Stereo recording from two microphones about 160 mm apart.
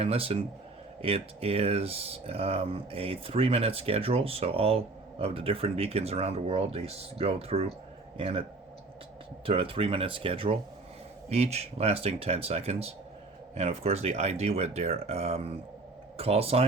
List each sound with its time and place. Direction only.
0.0 s speech: 35° right (ahead or behind)
9.5 s speech: 35° right (ahead or behind)